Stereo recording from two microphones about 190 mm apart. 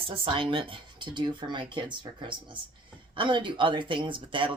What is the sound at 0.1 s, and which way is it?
Speech, 25° right (ahead or behind).